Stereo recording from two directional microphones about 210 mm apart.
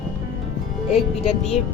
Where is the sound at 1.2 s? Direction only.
30° left (ahead or behind).